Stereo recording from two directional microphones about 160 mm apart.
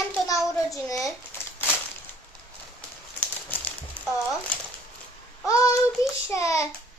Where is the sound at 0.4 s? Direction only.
20° left (ahead or behind).